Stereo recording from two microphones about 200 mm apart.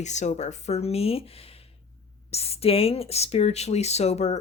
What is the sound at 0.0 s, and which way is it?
Speech, 35° left (ahead or behind).